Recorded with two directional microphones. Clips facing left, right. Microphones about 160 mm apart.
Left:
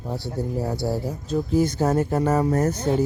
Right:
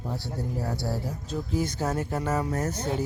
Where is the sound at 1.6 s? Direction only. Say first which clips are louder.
Left 8 dB; 35° left (ahead or behind).